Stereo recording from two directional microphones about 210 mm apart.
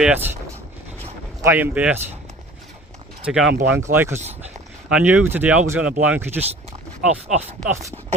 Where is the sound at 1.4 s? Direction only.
10° right (ahead or behind).